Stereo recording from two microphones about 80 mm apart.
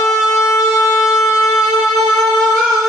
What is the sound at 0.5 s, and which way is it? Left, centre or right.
Shofar, left.